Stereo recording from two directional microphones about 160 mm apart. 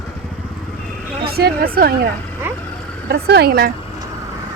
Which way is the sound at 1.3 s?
75° right (ahead or behind).